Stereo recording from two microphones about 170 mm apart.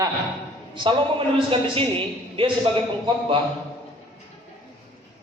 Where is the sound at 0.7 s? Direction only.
30° right (ahead or behind).